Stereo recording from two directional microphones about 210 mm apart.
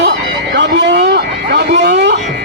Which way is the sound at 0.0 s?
55° right (ahead or behind).